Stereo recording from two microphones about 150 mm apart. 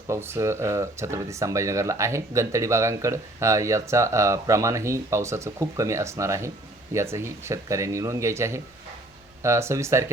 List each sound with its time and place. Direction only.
0.1 s speech: 15° right (ahead or behind)